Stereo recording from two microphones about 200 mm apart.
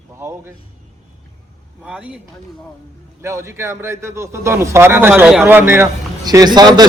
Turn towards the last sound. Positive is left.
turn(degrees=-20)  # may be behind; listen again after turning